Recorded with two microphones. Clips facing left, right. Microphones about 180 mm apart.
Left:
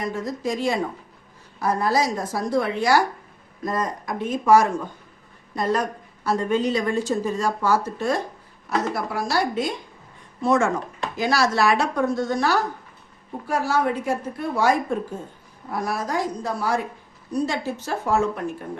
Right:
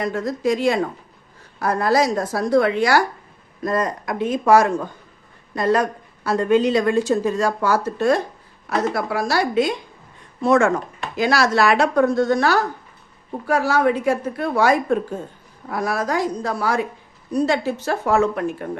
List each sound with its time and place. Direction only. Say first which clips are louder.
0.0 s a woman's voice: right 5 dB; 70° right (ahead or behind)
9.0 s a woman's voice: right 3 dB; 85° right
13.5 s a woman's voice: right 4 dB; 90° right
15.7 s a woman's voice: right 3 dB; 90° right
17.3 s a woman's voice: right 5 dB; 70° right (ahead or behind)